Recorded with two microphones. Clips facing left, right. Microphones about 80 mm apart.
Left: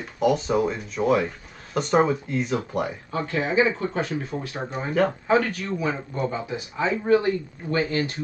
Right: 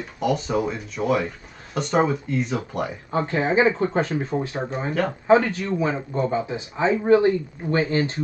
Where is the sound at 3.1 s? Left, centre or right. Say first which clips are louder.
Right 3 dB; right.